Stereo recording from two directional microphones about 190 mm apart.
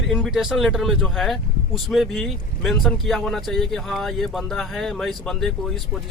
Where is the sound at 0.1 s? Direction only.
Centre (ahead or behind).